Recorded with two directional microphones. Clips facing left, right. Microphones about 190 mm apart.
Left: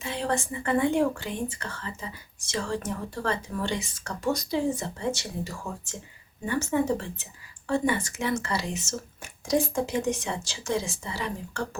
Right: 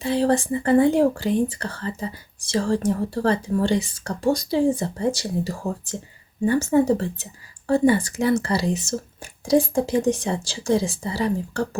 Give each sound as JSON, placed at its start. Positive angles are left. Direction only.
{"t": 0.0, "sound": "speech", "side_deg": -35}